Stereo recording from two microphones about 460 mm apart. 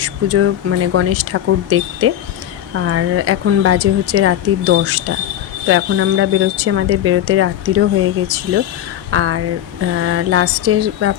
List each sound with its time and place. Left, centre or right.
0.0 s speech: right